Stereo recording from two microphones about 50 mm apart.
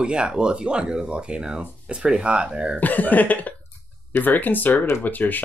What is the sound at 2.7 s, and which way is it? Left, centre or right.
Speech, left.